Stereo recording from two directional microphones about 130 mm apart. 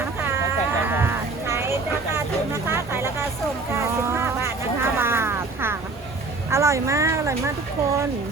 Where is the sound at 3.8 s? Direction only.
20° right (ahead or behind).